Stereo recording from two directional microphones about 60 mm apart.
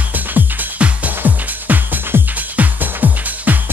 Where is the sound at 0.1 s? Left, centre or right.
Right.